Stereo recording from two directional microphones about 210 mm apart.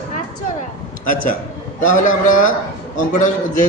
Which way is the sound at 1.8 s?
40° left (ahead or behind).